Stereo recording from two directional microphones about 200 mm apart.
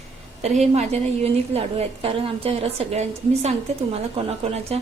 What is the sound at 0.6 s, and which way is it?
A woman's voice, 30° right (ahead or behind).